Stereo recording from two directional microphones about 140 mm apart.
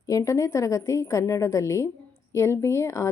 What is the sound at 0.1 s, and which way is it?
Speech, 25° left (ahead or behind).